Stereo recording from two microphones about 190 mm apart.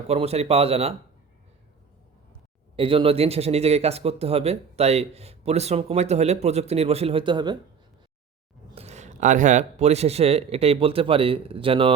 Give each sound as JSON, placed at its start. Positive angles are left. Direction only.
{"t": 0.1, "sound": "speech", "side_deg": -35}
{"t": 2.7, "sound": "speech", "side_deg": -30}
{"t": 8.7, "sound": "speech", "side_deg": -35}